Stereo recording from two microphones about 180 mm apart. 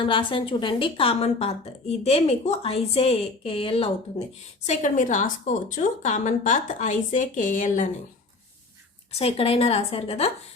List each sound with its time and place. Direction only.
0.0 s a woman's voice: 25° left (ahead or behind)
4.6 s a woman's voice: 40° left (ahead or behind)
9.1 s a woman's voice: 35° left (ahead or behind)